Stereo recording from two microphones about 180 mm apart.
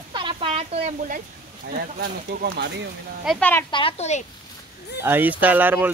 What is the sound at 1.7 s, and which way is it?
Speech, 55° right (ahead or behind).